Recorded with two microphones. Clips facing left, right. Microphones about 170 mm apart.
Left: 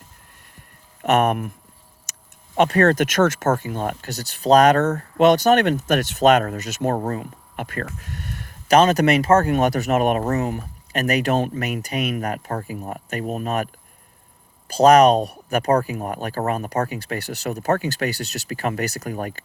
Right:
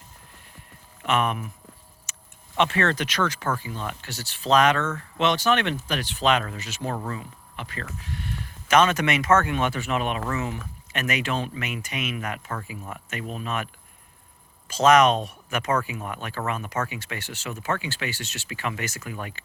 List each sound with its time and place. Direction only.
1.0 s speech: 45° left (ahead or behind)
2.1 s a sound: 40° left (ahead or behind)
2.6 s speech: 45° left (ahead or behind)
14.7 s speech: 35° left (ahead or behind)